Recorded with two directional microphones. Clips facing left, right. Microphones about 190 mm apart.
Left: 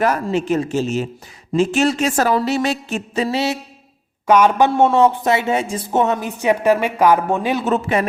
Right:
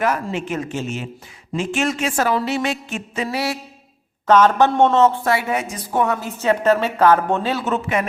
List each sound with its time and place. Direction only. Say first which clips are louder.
0.0 s a woman's voice: left 3 dB; 35° left (ahead or behind)
4.3 s speech: left 1 dB; 10° left (ahead or behind)
7.6 s a woman's voice: left 3 dB; 35° left (ahead or behind)